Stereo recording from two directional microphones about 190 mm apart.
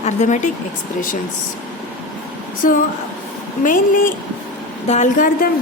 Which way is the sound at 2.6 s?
45° left (ahead or behind).